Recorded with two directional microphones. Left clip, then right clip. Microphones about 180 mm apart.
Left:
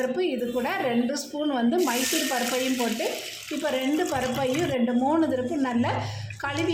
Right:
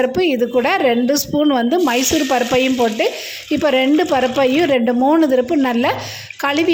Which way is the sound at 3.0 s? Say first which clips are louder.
Right 10 dB; 45° right (ahead or behind).